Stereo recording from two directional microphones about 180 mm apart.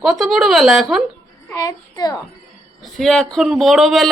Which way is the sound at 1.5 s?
20° left (ahead or behind).